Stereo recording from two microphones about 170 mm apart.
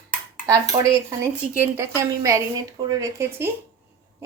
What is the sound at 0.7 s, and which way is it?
A woman's voice, 20° right (ahead or behind).